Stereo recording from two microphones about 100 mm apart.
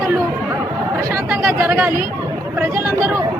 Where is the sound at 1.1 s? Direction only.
20° right (ahead or behind).